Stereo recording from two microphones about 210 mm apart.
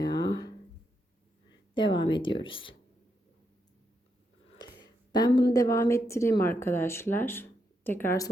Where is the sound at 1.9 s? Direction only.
20° left (ahead or behind).